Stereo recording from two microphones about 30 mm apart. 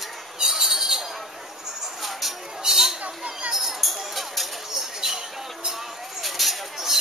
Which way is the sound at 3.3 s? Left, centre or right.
Right.